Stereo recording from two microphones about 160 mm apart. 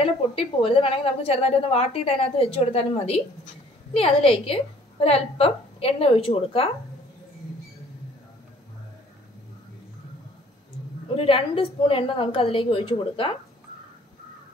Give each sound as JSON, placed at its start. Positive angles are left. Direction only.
{"t": 0.0, "sound": "a woman's voice", "side_deg": 35}
{"t": 11.1, "sound": "a woman's voice", "side_deg": 35}